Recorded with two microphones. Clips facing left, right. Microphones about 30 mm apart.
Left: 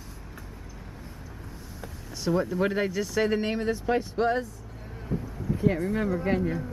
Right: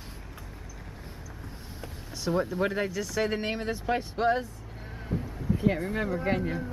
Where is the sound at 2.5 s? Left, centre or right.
Centre.